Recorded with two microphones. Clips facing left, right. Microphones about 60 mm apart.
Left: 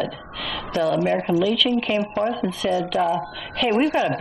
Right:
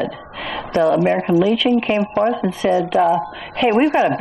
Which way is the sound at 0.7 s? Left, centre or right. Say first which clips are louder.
Right 5 dB; right.